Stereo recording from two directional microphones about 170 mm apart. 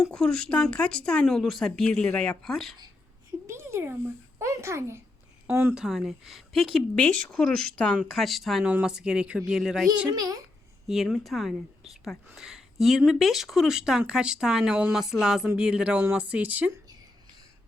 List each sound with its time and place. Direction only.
0.0 s speech: 5° left (ahead or behind)
3.4 s a sound: 15° right (ahead or behind)
4.4 s a child's voice: 15° right (ahead or behind)
10.1 s a child's voice: 20° right (ahead or behind)
10.8 s speech: centre (ahead or behind)